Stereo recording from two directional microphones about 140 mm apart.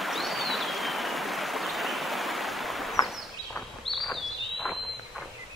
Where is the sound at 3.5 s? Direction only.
5° left (ahead or behind).